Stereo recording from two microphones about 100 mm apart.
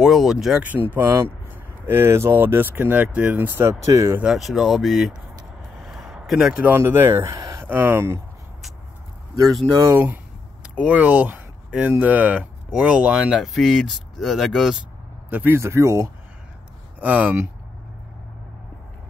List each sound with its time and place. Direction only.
0.0 s speech: centre (ahead or behind)
0.7 s speech: 20° right (ahead or behind)
3.8 s speech: 35° right (ahead or behind)
4.2 s speech: 5° right (ahead or behind)
5.8 s a sound: centre (ahead or behind)
6.6 s speech: 25° right (ahead or behind)
7.3 s a sound: 35° right (ahead or behind)
7.6 s speech: 20° right (ahead or behind)
9.8 s a sound: 20° right (ahead or behind)
12.0 s speech: 15° right (ahead or behind)
15.2 s speech: 20° right (ahead or behind)
17.0 s speech: 15° right (ahead or behind)